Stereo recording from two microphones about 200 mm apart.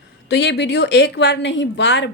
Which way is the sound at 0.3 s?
60° left (ahead or behind).